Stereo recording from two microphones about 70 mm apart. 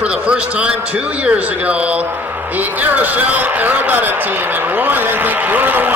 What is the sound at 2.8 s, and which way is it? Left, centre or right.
Speech, right.